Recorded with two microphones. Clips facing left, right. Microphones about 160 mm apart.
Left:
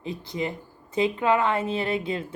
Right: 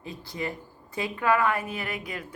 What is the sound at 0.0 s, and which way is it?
Speech, 20° left (ahead or behind).